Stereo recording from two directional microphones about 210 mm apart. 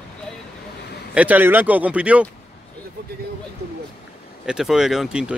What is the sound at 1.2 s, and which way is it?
Speech, 10° right (ahead or behind).